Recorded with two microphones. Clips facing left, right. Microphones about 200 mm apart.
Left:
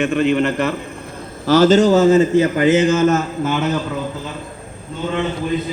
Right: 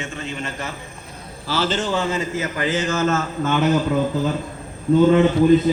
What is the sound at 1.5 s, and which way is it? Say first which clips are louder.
A man's voice: left 11 dB; 40° left (ahead or behind).